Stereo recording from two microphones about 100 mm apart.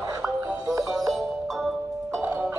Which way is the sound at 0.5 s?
35° right (ahead or behind).